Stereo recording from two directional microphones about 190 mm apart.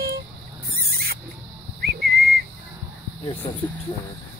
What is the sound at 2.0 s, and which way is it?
Whistling, 55° right (ahead or behind).